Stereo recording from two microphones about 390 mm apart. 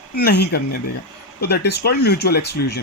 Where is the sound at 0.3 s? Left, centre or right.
Left.